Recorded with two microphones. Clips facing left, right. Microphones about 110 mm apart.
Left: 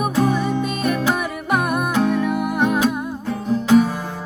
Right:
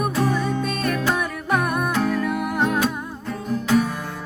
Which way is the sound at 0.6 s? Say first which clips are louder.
Left 3 dB; 5° left (ahead or behind).